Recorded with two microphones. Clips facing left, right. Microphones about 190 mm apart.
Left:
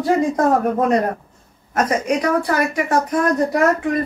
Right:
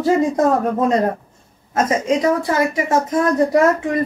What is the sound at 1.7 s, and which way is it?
Speech, 25° right (ahead or behind).